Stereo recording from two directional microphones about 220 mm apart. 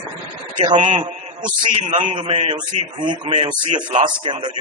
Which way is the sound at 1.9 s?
25° right (ahead or behind).